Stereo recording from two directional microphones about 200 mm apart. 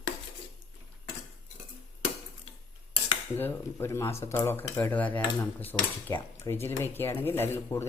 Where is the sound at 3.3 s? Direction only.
10° left (ahead or behind).